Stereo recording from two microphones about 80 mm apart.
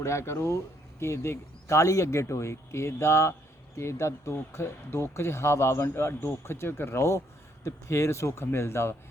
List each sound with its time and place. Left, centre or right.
0.0 s speech: left